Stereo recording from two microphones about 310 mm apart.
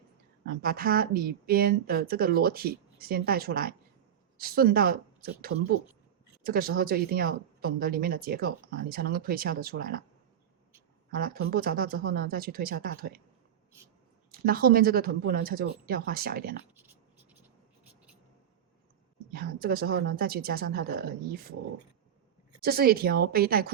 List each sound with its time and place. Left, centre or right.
0.4 s speech: right
11.1 s speech: right
14.3 s speech: right
19.3 s speech: right
22.6 s speech: right